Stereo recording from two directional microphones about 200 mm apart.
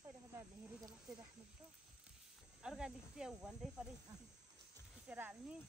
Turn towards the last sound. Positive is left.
turn(degrees=-5)  # may be behind; listen again after turning